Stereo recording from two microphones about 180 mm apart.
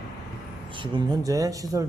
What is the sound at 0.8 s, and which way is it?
Speech, 20° right (ahead or behind).